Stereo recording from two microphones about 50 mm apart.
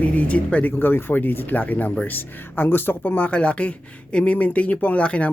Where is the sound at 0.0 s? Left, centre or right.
Left.